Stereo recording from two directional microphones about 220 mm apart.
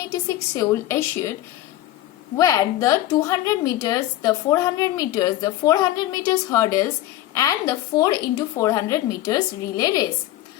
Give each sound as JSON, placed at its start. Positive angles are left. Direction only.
{"t": 0.3, "sound": "a woman's voice", "side_deg": 15}
{"t": 2.3, "sound": "a woman's voice", "side_deg": 15}